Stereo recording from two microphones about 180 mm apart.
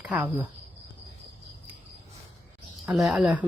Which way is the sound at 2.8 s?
Centre (ahead or behind).